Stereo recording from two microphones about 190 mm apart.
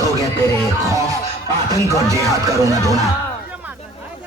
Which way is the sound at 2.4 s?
15° right (ahead or behind).